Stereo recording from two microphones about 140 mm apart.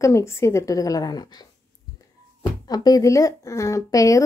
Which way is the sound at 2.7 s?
25° left (ahead or behind).